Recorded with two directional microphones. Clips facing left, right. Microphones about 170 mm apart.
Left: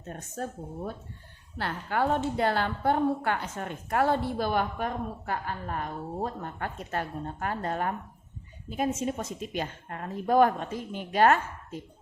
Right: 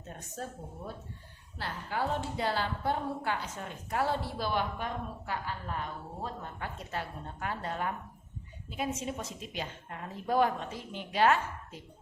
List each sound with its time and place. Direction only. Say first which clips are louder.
0.4 s a woman's voice: left 5 dB; 60° left (ahead or behind)
1.5 s a woman's voice: left 6 dB; 60° left (ahead or behind)